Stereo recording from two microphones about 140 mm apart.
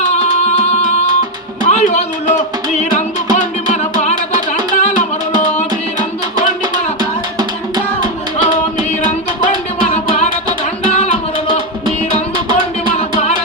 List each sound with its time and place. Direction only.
0.0 s music: 55° left (ahead or behind)
4.7 s music: 55° left (ahead or behind)
10.8 s music: 50° left (ahead or behind)